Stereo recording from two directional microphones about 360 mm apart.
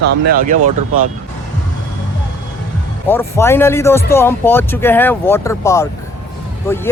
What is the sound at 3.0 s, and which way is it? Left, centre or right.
Speech, centre.